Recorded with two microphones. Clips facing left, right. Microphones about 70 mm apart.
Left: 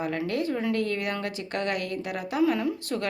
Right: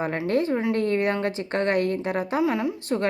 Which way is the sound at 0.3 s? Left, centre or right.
Right.